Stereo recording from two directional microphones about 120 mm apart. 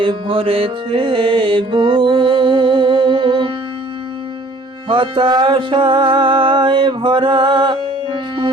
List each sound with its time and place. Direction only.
0.0 s music: 45° right (ahead or behind)
4.9 s music: 45° right (ahead or behind)